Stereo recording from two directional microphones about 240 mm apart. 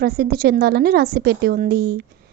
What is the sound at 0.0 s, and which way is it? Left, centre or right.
Speech, right.